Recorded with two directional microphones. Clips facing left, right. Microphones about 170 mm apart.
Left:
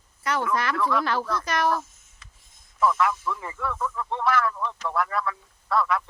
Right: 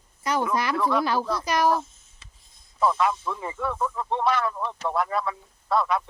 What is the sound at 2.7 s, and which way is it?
Speech, 30° right (ahead or behind).